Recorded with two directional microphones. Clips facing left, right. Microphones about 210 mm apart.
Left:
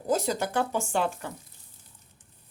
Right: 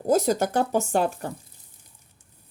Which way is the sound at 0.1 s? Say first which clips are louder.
Right 6 dB; 45° right (ahead or behind).